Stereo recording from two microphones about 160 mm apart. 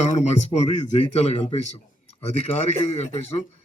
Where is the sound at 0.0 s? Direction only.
45° left (ahead or behind).